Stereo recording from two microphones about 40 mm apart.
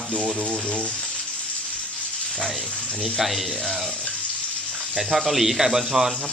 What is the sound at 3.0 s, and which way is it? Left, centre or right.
Speech, centre.